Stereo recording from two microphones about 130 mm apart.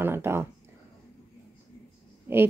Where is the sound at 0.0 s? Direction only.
20° right (ahead or behind).